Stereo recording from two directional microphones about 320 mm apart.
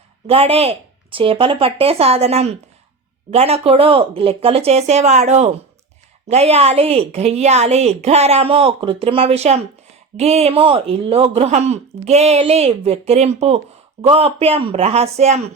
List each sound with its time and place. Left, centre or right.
0.3 s a woman's voice: centre